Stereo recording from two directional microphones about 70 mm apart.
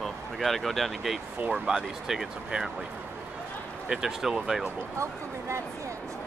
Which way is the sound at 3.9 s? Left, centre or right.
Centre.